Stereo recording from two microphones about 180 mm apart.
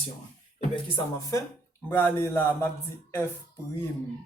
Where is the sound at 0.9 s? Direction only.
20° left (ahead or behind).